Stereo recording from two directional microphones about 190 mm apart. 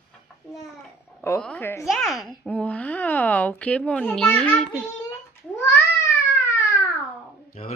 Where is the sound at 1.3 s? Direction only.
5° left (ahead or behind).